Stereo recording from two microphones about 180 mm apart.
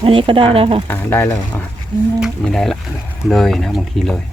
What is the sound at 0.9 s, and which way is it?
Speech, 10° left (ahead or behind).